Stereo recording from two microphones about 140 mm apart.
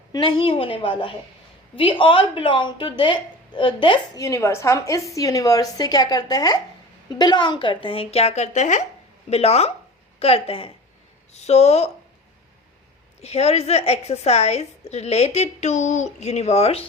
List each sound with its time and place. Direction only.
0.1 s speech: 35° left (ahead or behind)
4.2 s a woman's voice: 20° left (ahead or behind); by 11.9 s 50° left (ahead or behind)
13.2 s a woman's voice: 50° left (ahead or behind)